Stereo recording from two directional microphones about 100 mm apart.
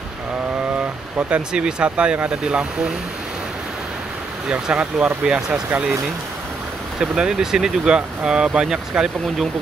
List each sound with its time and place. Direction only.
0.7 s speech: 10° right (ahead or behind)
4.5 s speech: 10° right (ahead or behind)
7.0 s speech: 5° right (ahead or behind)